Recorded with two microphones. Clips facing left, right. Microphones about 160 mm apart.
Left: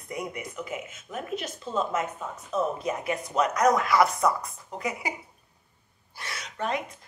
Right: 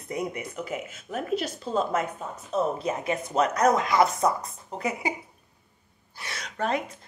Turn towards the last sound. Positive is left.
turn(degrees=-35)  # may be behind; listen again after turning